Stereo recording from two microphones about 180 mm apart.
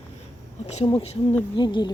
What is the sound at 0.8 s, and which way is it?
Speech, 35° left (ahead or behind).